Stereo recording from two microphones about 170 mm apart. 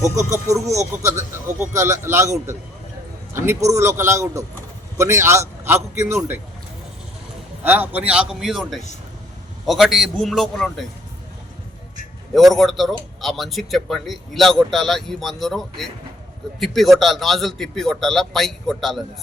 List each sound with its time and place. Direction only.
0.4 s a man's voice: 20° right (ahead or behind)
7.6 s speech: 10° right (ahead or behind)
12.3 s speech: centre (ahead or behind)